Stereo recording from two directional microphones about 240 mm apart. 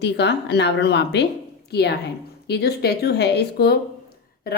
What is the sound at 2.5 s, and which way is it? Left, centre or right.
A woman's voice, left.